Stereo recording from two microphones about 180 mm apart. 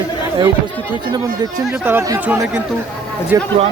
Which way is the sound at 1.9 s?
15° right (ahead or behind).